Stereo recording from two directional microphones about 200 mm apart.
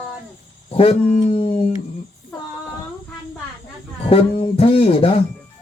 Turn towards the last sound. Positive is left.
turn(degrees=30)  # may be behind; listen again after turning